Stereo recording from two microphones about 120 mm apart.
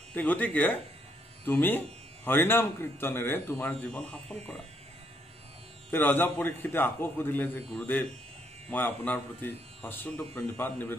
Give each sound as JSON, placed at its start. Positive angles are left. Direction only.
{"t": 0.1, "sound": "speech", "side_deg": 15}
{"t": 5.9, "sound": "speech", "side_deg": 15}